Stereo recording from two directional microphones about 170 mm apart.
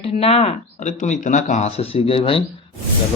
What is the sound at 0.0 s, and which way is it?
Speech, 35° left (ahead or behind).